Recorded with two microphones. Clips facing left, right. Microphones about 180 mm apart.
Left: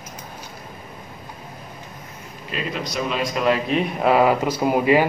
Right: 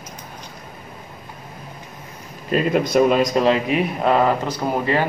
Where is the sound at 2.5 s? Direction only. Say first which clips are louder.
Right 10 dB; 50° right (ahead or behind).